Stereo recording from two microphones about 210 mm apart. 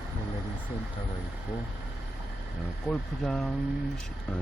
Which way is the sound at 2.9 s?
5° left (ahead or behind).